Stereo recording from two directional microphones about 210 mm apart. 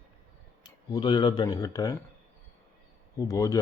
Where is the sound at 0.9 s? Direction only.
20° left (ahead or behind).